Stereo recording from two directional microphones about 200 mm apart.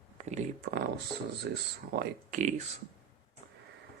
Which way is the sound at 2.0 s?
40° right (ahead or behind).